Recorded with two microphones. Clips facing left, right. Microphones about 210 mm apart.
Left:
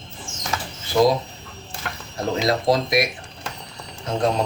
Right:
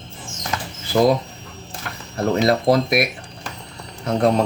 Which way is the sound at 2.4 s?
60° right (ahead or behind).